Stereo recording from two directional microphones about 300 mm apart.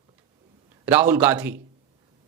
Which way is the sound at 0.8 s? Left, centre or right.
Centre.